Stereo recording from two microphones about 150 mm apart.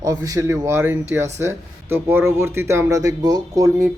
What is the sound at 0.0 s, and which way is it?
Speech, 20° right (ahead or behind).